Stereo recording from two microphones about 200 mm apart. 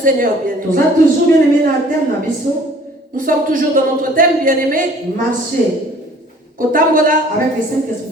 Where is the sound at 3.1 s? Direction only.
45° right (ahead or behind).